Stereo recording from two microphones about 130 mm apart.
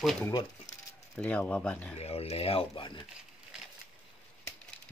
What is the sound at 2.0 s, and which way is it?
Speech, 50° left (ahead or behind).